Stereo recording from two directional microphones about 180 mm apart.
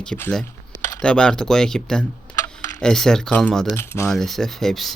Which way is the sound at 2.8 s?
5° left (ahead or behind).